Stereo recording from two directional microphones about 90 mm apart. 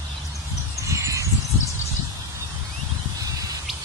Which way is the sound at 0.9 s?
35° right (ahead or behind).